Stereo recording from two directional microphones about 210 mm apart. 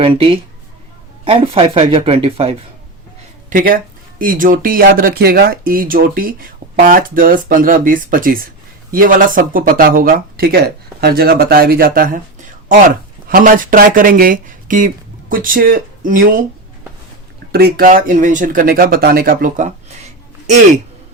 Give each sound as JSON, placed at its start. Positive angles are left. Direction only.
{"t": 0.0, "sound": "speech", "side_deg": -25}
{"t": 3.5, "sound": "speech", "side_deg": -40}
{"t": 13.2, "sound": "speech", "side_deg": -40}
{"t": 17.5, "sound": "speech", "side_deg": -45}